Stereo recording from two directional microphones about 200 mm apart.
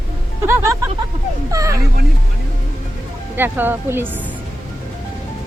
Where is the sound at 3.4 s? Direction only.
10° right (ahead or behind).